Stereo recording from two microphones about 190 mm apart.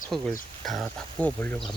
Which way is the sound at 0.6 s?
Centre (ahead or behind).